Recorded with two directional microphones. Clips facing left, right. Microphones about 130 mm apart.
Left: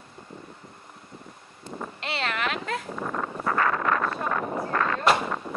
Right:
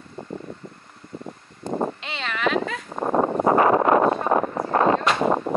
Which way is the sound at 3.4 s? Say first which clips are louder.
Right 7 dB; 25° right (ahead or behind).